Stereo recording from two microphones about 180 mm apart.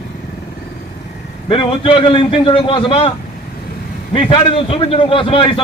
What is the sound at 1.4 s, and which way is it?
A man's voice, 30° left (ahead or behind).